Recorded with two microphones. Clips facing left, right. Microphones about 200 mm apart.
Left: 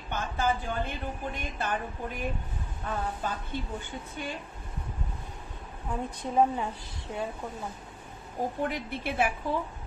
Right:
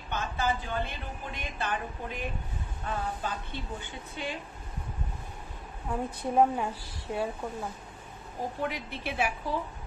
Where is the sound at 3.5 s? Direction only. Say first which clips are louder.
Left 3 dB; 45° left (ahead or behind).